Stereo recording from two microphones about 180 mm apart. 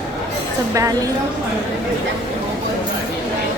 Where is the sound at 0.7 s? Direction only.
20° right (ahead or behind).